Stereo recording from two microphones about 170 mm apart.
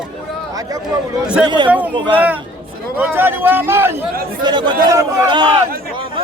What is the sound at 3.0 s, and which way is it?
Speech, 10° right (ahead or behind).